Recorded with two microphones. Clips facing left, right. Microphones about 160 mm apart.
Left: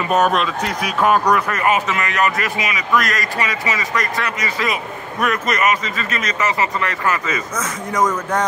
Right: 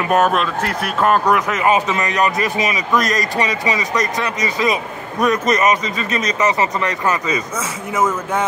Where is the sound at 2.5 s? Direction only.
35° right (ahead or behind).